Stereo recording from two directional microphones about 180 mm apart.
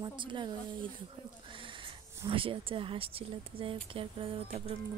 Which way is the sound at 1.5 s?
30° right (ahead or behind).